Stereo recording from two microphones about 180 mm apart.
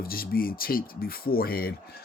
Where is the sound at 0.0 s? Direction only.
55° left (ahead or behind).